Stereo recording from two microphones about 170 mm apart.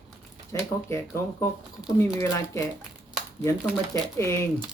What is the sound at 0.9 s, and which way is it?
Speech, 15° left (ahead or behind).